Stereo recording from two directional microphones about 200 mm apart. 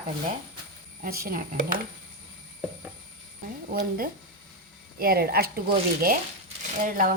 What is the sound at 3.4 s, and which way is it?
A woman's voice, 45° right (ahead or behind).